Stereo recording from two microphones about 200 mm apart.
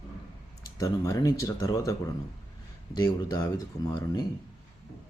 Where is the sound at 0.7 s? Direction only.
15° left (ahead or behind).